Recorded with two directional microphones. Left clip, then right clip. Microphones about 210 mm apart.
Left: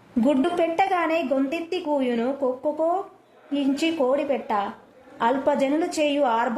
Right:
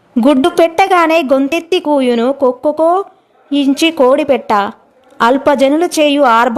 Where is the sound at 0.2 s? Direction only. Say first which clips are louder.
Right 12 dB; 50° right (ahead or behind).